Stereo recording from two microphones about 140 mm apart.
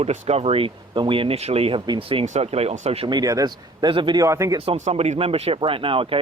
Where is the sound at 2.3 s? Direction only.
50° right (ahead or behind).